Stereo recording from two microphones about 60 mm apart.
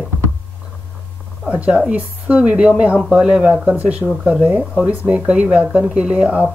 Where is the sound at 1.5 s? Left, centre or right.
Right.